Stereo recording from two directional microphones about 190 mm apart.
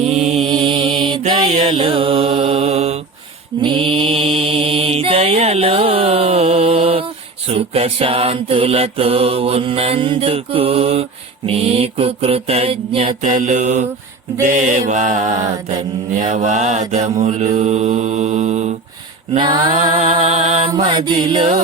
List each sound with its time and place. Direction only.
0.1 s mantra: 35° right (ahead or behind)
19.4 s music: 25° right (ahead or behind)
19.7 s mantra: 35° right (ahead or behind)
20.9 s music: 25° right (ahead or behind)